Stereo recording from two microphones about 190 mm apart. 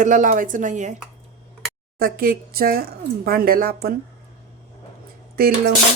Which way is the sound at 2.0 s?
50° right (ahead or behind).